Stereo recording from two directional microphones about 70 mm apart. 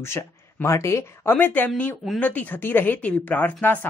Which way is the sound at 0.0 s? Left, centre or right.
Left.